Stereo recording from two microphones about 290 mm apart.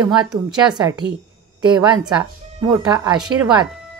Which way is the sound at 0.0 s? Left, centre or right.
Centre.